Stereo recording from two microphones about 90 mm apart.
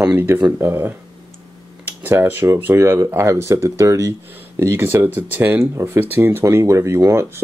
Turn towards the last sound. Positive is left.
turn(degrees=-30)  # may be behind; listen again after turning